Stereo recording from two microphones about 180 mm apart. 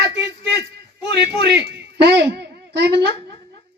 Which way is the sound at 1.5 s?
65° right (ahead or behind).